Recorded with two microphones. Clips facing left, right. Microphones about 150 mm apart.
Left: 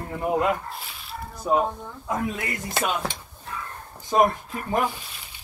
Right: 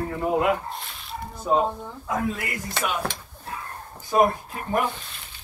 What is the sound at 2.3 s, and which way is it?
Speech, 25° left (ahead or behind).